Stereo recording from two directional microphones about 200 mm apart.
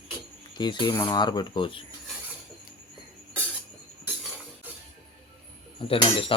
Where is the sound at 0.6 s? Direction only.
20° left (ahead or behind).